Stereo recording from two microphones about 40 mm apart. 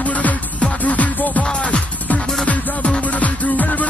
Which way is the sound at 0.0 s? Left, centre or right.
Left.